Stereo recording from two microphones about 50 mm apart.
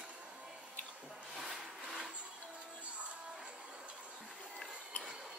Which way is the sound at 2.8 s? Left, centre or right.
Right.